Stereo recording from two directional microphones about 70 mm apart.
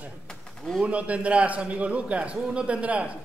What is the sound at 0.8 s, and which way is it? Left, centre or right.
A man's voice, centre.